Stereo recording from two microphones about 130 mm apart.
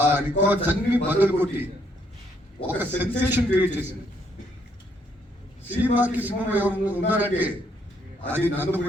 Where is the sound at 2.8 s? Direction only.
15° right (ahead or behind).